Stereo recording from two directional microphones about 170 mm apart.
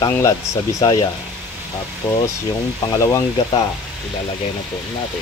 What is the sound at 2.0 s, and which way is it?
Speech, 10° left (ahead or behind).